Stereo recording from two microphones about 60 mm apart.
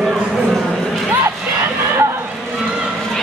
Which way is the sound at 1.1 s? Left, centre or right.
Right.